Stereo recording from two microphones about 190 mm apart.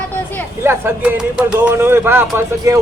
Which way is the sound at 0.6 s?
10° right (ahead or behind).